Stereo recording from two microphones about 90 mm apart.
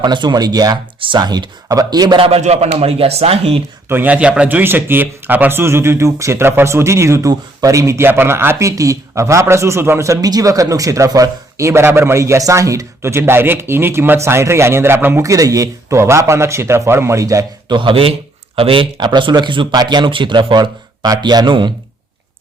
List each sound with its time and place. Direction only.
0.0 s speech: 55° right (ahead or behind)
0.9 s speech: 70° right (ahead or behind)
1.2 s speech: 50° right (ahead or behind)
2.7 s speech: 90° right
3.8 s a man's voice: 20° right (ahead or behind); by 17.4 s 35° right (ahead or behind)
17.7 s a man's voice: 65° right (ahead or behind); by 18.9 s 85° right
18.9 s speech: 55° right (ahead or behind)